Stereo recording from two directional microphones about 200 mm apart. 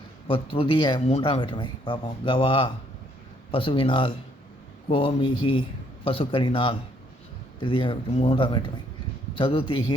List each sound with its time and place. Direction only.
0.3 s speech: 25° left (ahead or behind)